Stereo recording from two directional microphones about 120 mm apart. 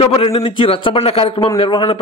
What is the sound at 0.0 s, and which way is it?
A man's voice, 55° left (ahead or behind).